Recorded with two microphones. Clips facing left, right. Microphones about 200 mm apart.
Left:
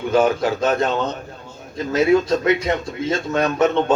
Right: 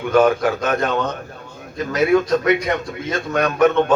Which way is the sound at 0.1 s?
25° left (ahead or behind).